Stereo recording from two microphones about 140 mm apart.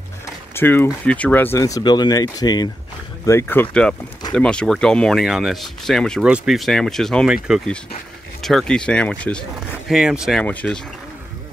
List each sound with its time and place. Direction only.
0.6 s speech: 15° left (ahead or behind)
3.3 s speech: 15° left (ahead or behind)
9.8 s speech: 5° right (ahead or behind)
10.4 s speech: 10° left (ahead or behind)